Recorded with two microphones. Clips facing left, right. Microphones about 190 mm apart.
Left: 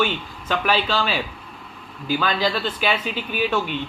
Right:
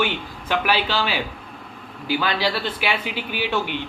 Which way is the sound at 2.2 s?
10° right (ahead or behind).